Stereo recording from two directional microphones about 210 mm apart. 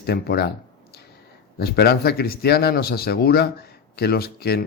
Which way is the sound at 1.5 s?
50° left (ahead or behind).